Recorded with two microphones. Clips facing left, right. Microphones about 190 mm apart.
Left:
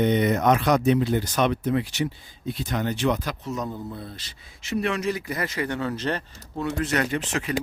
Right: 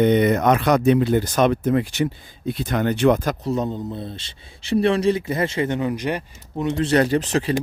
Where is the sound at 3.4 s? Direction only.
30° right (ahead or behind).